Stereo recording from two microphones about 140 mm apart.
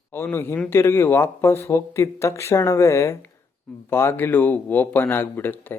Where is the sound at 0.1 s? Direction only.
15° left (ahead or behind).